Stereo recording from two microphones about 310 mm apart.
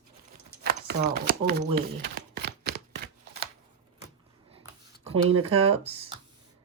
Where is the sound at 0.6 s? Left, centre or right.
Right.